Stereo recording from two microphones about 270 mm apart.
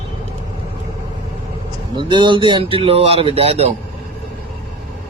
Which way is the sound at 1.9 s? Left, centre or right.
Centre.